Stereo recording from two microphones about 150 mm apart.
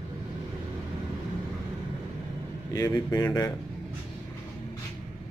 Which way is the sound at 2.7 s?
25° left (ahead or behind).